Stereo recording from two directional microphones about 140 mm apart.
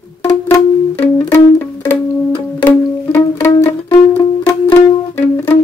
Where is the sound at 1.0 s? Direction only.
15° left (ahead or behind).